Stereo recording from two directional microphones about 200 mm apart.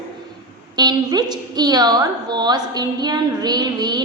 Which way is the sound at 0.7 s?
20° right (ahead or behind).